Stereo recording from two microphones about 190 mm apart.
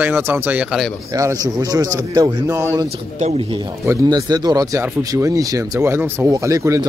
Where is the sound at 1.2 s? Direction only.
20° right (ahead or behind).